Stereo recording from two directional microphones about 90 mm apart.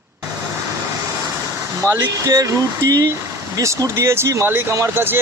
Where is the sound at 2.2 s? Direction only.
35° right (ahead or behind).